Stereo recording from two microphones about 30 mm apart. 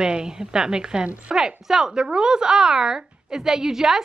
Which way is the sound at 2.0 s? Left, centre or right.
Right.